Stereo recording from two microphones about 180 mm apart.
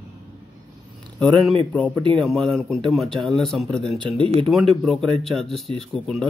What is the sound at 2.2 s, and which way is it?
Speech, centre (ahead or behind).